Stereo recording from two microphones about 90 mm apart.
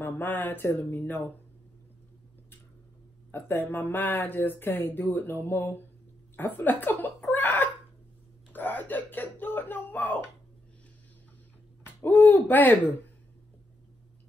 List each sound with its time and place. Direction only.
0.0 s speech: 20° left (ahead or behind)
3.3 s speech: 25° left (ahead or behind)
6.3 s chuckle: 20° left (ahead or behind)
8.5 s a sound: 20° left (ahead or behind)
11.8 s speech: 25° left (ahead or behind)